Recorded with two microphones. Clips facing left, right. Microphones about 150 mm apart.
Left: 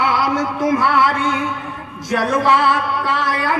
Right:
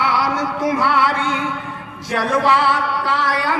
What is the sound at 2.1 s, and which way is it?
Speech, 45° left (ahead or behind).